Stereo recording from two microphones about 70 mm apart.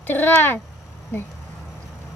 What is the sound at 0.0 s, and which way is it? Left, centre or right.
Speech, left.